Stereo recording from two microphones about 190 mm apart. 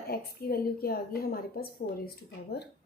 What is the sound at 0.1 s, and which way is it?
A woman's voice, 55° left (ahead or behind).